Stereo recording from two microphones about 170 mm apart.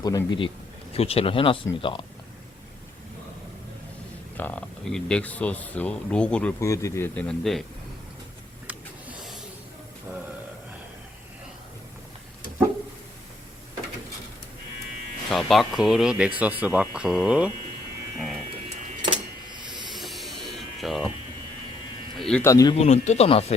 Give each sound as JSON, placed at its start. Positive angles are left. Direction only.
{"t": 0.0, "sound": "a man's voice", "side_deg": 20}
{"t": 4.4, "sound": "speech", "side_deg": 10}
{"t": 6.6, "sound": "speech", "side_deg": 15}
{"t": 8.6, "sound": "a sound", "side_deg": -5}
{"t": 15.3, "sound": "speech", "side_deg": 0}
{"t": 19.0, "sound": "a sound", "side_deg": -25}
{"t": 19.7, "sound": "electric shaver", "side_deg": 0}
{"t": 22.2, "sound": "a sound", "side_deg": 5}
{"t": 22.4, "sound": "a man's voice", "side_deg": 20}
{"t": 22.7, "sound": "speech", "side_deg": 40}